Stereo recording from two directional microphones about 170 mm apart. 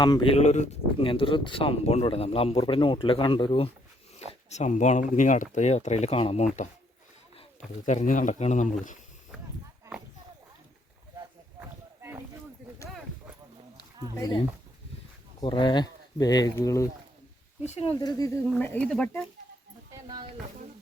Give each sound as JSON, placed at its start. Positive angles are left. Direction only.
{"t": 0.0, "sound": "speech", "side_deg": 25}
{"t": 0.3, "sound": "speech", "side_deg": 45}
{"t": 4.4, "sound": "speech", "side_deg": 45}
{"t": 7.9, "sound": "speech", "side_deg": 45}
{"t": 15.4, "sound": "speech", "side_deg": 25}
{"t": 17.7, "sound": "speech", "side_deg": 40}
{"t": 18.0, "sound": "speech", "side_deg": 20}
{"t": 18.6, "sound": "speech", "side_deg": 10}
{"t": 19.9, "sound": "a sound", "side_deg": -25}